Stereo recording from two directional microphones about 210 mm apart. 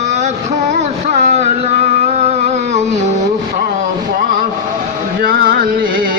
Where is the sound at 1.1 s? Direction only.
30° right (ahead or behind).